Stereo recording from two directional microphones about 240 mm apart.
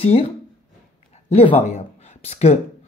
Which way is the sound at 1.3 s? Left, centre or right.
Left.